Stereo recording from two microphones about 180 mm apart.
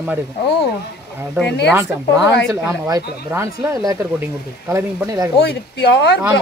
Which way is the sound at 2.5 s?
20° right (ahead or behind).